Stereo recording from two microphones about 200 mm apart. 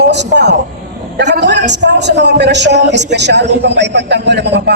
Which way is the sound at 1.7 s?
60° right (ahead or behind).